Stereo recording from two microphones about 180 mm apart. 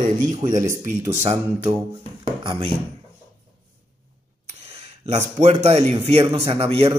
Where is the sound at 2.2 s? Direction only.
25° right (ahead or behind).